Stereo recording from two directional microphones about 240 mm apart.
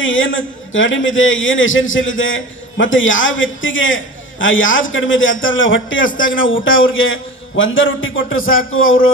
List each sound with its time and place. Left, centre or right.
0.0 s a man's voice: left